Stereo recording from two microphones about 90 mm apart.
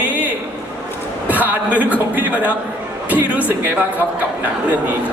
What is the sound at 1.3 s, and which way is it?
A man's voice, 15° right (ahead or behind).